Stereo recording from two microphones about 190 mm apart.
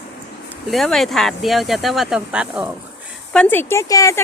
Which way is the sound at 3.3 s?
5° left (ahead or behind).